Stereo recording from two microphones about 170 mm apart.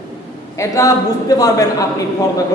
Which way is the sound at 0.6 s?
20° left (ahead or behind).